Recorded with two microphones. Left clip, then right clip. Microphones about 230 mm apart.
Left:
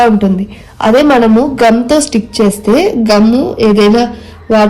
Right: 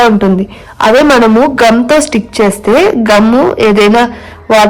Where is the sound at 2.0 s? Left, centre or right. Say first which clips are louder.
Right 2 dB; right.